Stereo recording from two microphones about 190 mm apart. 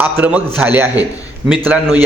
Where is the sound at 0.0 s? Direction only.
5° right (ahead or behind).